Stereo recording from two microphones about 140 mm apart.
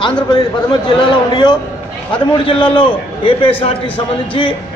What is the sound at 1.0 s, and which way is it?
A man's voice, 35° left (ahead or behind).